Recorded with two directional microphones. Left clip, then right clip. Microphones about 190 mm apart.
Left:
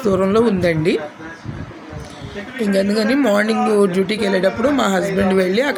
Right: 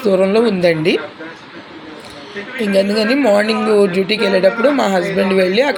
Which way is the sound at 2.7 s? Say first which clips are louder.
Right 3 dB; 15° left (ahead or behind).